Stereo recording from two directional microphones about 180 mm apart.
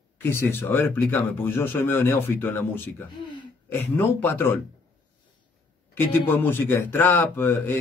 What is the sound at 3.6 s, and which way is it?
Speech, 10° left (ahead or behind).